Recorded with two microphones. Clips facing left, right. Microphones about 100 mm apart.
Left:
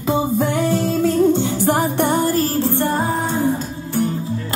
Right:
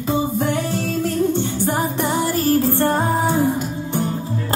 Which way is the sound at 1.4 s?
90° left.